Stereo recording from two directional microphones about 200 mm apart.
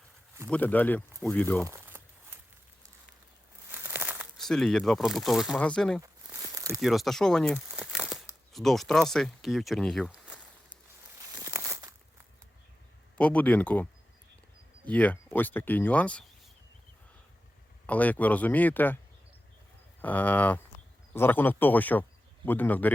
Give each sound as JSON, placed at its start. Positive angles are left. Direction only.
{"t": 0.5, "sound": "speech", "side_deg": 10}
{"t": 1.6, "sound": "a sound", "side_deg": -10}
{"t": 3.7, "sound": "speech", "side_deg": -10}
{"t": 6.0, "sound": "a sound", "side_deg": -15}
{"t": 6.7, "sound": "speech", "side_deg": 0}
{"t": 11.2, "sound": "a sound", "side_deg": -15}
{"t": 13.1, "sound": "speech", "side_deg": 5}
{"t": 14.8, "sound": "speech", "side_deg": 5}
{"t": 17.8, "sound": "speech", "side_deg": 5}
{"t": 20.0, "sound": "speech", "side_deg": 10}